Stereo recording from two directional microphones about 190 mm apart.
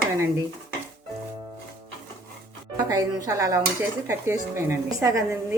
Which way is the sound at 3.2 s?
15° right (ahead or behind).